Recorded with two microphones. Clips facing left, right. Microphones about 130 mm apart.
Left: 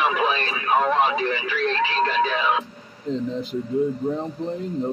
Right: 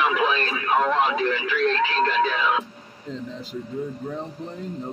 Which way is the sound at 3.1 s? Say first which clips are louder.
Left 8 dB; 20° left (ahead or behind).